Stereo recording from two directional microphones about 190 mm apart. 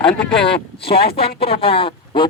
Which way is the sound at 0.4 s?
30° left (ahead or behind).